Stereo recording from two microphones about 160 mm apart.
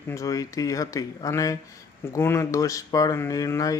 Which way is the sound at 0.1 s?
20° left (ahead or behind).